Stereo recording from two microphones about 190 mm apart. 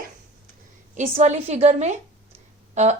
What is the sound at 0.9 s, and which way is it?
A woman's voice, 40° right (ahead or behind).